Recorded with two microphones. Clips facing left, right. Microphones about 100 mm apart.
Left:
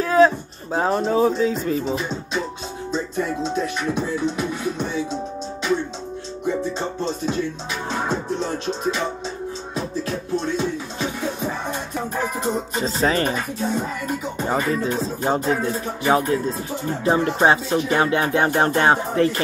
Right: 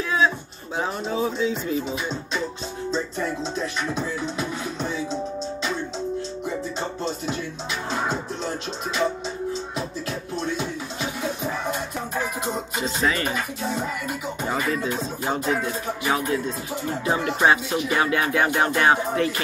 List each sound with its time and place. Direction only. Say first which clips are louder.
0.0 s a sound: left 7 dB; 40° left (ahead or behind)
0.7 s speech: left 7 dB; 45° left (ahead or behind)
12.7 s speech: left 3 dB; 35° left (ahead or behind)
14.0 s music: left 3 dB; 35° left (ahead or behind)